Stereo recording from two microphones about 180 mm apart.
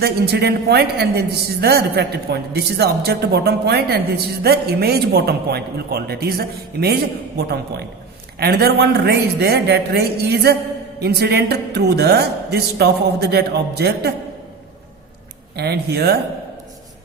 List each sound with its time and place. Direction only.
0.0 s speech: 65° right (ahead or behind)
15.5 s speech: 65° right (ahead or behind)